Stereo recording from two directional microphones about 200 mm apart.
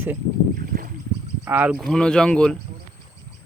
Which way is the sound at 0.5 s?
45° right (ahead or behind).